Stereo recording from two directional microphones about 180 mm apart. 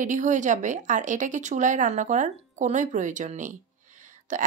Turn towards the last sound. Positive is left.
turn(degrees=-45)  # may be behind; listen again after turning